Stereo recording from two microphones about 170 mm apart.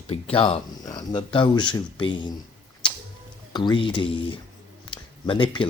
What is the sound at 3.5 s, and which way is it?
Speech, 25° left (ahead or behind).